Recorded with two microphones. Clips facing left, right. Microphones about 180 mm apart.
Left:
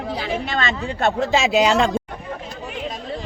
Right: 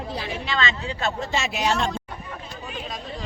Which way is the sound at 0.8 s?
75° left (ahead or behind).